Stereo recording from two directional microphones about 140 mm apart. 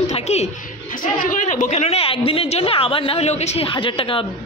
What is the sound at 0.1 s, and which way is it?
Speech, 50° left (ahead or behind).